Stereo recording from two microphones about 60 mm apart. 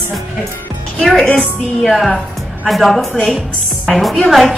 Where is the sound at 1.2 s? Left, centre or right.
Centre.